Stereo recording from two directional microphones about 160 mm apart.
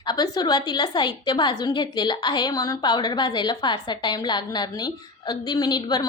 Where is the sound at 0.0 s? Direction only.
25° left (ahead or behind).